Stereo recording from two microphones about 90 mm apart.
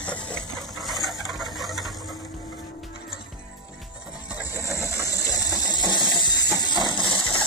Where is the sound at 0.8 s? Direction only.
Centre (ahead or behind).